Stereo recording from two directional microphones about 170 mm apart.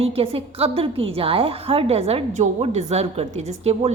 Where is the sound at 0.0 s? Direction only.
35° right (ahead or behind).